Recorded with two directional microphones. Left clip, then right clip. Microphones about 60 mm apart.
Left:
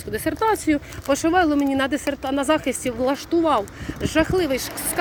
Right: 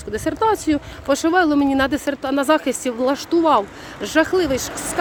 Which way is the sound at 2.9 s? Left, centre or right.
Right.